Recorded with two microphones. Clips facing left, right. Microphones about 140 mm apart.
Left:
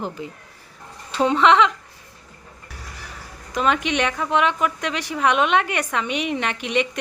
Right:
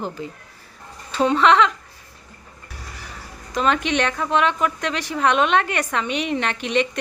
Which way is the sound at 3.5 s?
10° left (ahead or behind).